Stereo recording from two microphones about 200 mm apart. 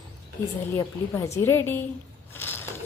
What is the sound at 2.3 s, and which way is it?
Mechanisms, 10° left (ahead or behind).